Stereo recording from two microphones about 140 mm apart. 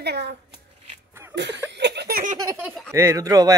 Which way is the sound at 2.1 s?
90° right.